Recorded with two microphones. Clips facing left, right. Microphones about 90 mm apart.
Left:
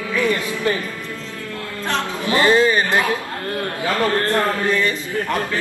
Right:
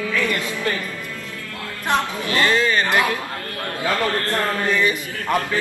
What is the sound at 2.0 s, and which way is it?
A man's voice, 20° left (ahead or behind).